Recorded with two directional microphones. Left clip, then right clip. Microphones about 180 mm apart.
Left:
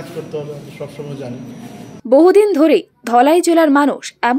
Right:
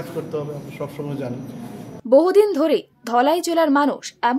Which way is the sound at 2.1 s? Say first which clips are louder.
Left 4 dB; 20° left (ahead or behind).